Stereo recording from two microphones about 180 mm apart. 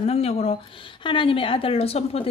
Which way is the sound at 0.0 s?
35° left (ahead or behind).